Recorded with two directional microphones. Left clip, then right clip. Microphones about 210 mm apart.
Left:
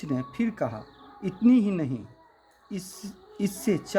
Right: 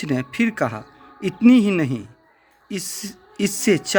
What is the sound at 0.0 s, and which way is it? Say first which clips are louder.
Speech: right 8 dB; 35° right (ahead or behind).